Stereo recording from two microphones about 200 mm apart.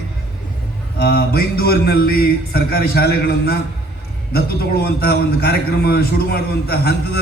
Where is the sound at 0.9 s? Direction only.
50° left (ahead or behind).